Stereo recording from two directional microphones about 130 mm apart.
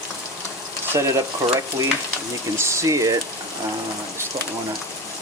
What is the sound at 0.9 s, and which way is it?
Frying, 25° right (ahead or behind).